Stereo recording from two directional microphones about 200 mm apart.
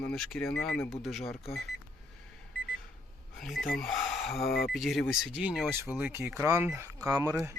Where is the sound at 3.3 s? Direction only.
Centre (ahead or behind).